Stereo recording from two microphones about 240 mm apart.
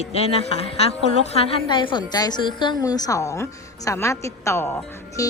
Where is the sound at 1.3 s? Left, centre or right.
Left.